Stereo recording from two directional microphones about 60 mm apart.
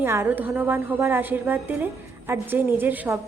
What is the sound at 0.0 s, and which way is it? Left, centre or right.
Speech, right.